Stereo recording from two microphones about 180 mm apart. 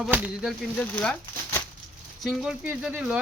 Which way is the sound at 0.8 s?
10° left (ahead or behind).